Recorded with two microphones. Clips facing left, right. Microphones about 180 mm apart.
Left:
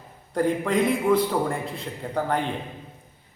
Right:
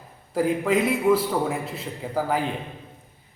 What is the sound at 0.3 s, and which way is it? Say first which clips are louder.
A man's voice: right 1 dB; 5° right (ahead or behind).